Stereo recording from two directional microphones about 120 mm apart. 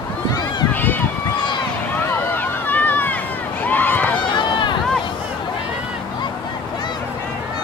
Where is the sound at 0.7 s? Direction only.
15° left (ahead or behind).